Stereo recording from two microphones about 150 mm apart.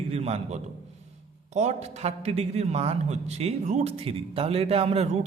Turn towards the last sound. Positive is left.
turn(degrees=-45)  # may be behind; listen again after turning